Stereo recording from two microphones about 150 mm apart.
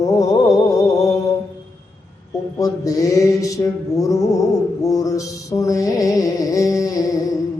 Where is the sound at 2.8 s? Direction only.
20° left (ahead or behind).